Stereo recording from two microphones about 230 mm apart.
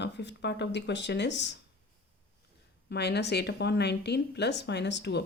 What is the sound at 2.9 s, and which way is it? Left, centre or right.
Speech, left.